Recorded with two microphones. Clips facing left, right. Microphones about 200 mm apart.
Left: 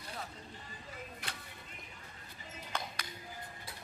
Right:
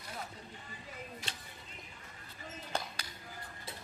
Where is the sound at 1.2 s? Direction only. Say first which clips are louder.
Even; 55° left (ahead or behind).